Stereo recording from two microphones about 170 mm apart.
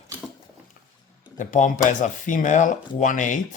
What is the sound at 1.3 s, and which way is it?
Speech, 50° left (ahead or behind).